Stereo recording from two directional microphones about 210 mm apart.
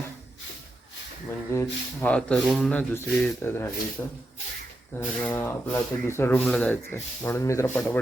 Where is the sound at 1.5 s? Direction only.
10° left (ahead or behind).